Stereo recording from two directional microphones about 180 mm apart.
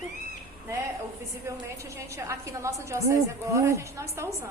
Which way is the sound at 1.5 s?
15° right (ahead or behind).